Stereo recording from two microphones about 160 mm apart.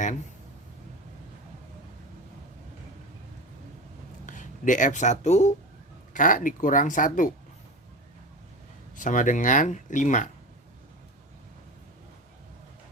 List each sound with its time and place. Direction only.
4.3 s speech: 50° left (ahead or behind)
9.0 s speech: 55° left (ahead or behind)